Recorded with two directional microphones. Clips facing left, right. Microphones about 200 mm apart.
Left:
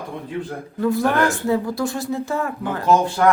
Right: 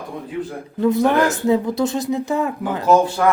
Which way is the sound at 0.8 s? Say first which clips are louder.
Right 3 dB; 20° right (ahead or behind).